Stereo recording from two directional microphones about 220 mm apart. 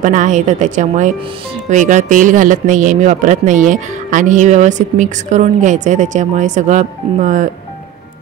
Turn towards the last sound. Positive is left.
turn(degrees=-35)  # may be behind; listen again after turning